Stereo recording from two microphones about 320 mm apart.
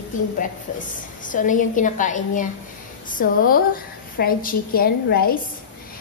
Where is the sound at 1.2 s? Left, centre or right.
Left.